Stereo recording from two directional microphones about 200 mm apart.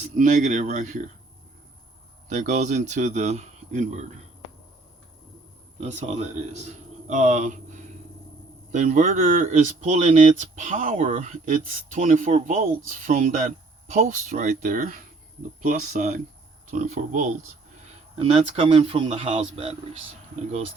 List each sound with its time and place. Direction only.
0.2 s speech: 40° right (ahead or behind)
2.3 s speech: 40° right (ahead or behind)
5.8 s speech: 35° right (ahead or behind)
8.7 s speech: 40° right (ahead or behind)
18.2 s speech: 30° right (ahead or behind)